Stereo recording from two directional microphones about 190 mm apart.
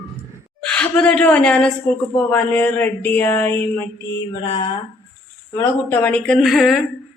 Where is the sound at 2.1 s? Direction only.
10° left (ahead or behind).